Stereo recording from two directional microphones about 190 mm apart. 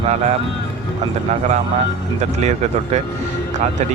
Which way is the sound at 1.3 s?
40° right (ahead or behind).